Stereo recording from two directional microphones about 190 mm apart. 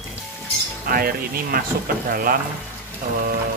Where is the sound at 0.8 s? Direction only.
50° right (ahead or behind).